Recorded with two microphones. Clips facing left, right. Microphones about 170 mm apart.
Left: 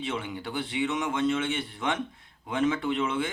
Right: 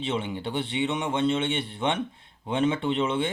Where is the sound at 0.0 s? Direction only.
25° right (ahead or behind).